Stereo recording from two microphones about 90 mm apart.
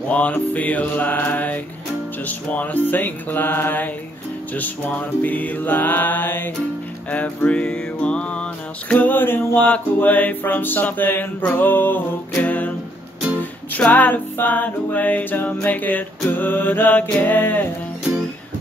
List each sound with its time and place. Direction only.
0.1 s music: 15° left (ahead or behind)